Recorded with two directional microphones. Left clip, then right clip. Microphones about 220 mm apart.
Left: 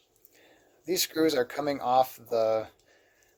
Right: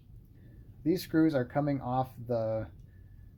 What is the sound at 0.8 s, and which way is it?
Speech, 45° left (ahead or behind).